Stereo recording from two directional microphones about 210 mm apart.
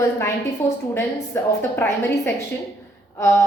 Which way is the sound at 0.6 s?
10° left (ahead or behind).